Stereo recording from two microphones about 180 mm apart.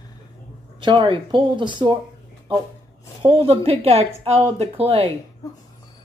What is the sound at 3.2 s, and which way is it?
A woman's voice, 30° right (ahead or behind).